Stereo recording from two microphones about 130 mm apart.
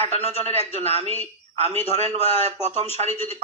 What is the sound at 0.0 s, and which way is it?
Speech, 55° right (ahead or behind).